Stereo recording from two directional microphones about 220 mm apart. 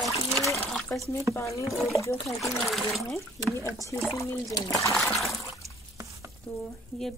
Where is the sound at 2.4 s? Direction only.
Centre (ahead or behind).